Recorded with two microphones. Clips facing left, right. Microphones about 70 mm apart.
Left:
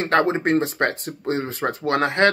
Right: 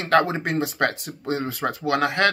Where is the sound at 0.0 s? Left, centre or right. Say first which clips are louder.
Left 1 dB; left.